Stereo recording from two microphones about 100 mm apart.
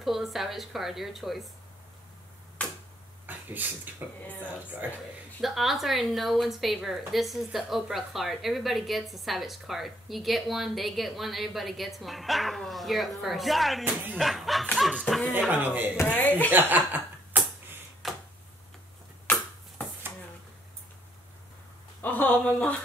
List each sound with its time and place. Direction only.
0.0 s a woman's voice: centre (ahead or behind)
2.6 s tick-tock: 15° left (ahead or behind)
3.3 s speech: 15° right (ahead or behind)
5.4 s a woman's voice: centre (ahead or behind)
15.5 s speech: 20° right (ahead or behind)
16.2 s speech: 15° left (ahead or behind)
16.5 s chuckle: 20° right (ahead or behind)
18.0 s a sound: centre (ahead or behind)
19.3 s chopping: 15° left (ahead or behind)
22.0 s a sound: 15° left (ahead or behind)